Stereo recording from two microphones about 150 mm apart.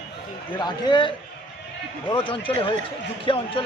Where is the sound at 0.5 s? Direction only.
30° left (ahead or behind).